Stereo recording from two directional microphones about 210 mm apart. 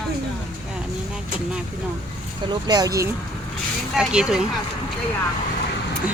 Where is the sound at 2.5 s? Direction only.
20° right (ahead or behind).